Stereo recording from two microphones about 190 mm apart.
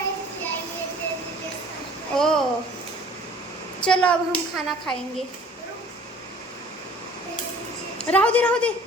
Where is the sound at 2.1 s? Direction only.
Centre (ahead or behind).